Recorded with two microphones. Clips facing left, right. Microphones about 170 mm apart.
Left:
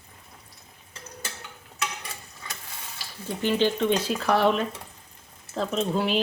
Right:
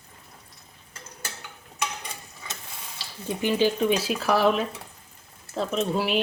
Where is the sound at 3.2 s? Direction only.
10° right (ahead or behind).